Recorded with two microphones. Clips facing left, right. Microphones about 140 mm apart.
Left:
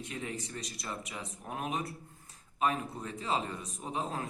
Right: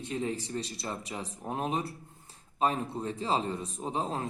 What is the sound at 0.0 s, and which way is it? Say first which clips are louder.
A man's voice: right 6 dB; 30° right (ahead or behind).